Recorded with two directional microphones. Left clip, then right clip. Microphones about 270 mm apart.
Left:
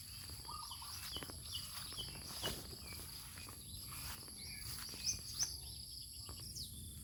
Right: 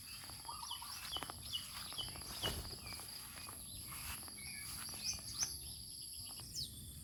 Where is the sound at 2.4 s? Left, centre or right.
Centre.